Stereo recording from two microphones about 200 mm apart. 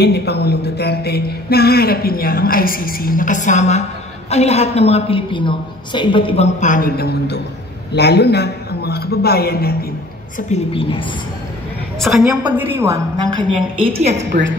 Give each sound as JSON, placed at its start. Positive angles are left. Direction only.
{"t": 0.0, "sound": "a man's voice", "side_deg": 55}
{"t": 10.5, "sound": "a woman's voice", "side_deg": 25}
{"t": 12.0, "sound": "a woman's voice", "side_deg": 0}